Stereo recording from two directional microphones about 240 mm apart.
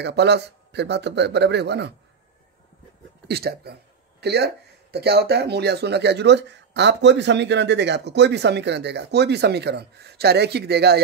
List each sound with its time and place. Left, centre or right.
0.0 s speech: right
3.3 s a man's voice: right